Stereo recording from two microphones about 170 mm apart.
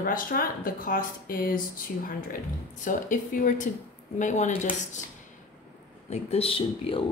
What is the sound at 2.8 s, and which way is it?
Speech, 50° left (ahead or behind).